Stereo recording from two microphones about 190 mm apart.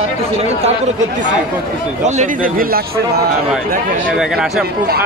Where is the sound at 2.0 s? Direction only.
40° right (ahead or behind).